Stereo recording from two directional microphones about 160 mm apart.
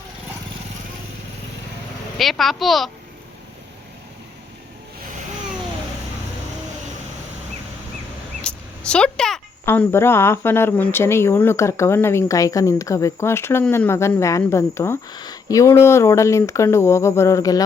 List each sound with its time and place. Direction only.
2.1 s a child's voice: centre (ahead or behind)
8.4 s speech: 5° left (ahead or behind)